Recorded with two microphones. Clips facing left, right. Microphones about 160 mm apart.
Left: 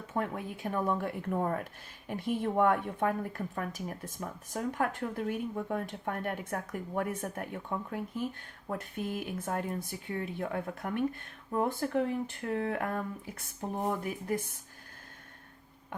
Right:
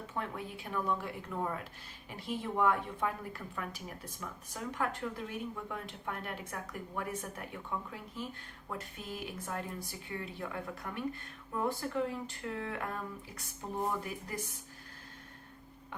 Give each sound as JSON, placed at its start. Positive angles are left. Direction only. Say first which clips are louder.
{"t": 0.1, "sound": "a woman's voice", "louder": "left 7 dB", "side_deg": 50}
{"t": 14.3, "sound": "a woman's voice", "louder": "left 8 dB", "side_deg": 55}